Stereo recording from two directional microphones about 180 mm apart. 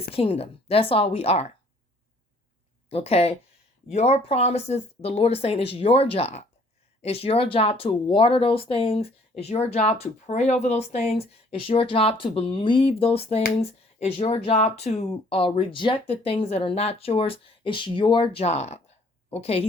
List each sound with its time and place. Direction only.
0.1 s speech: 35° left (ahead or behind)
2.9 s speech: 35° left (ahead or behind)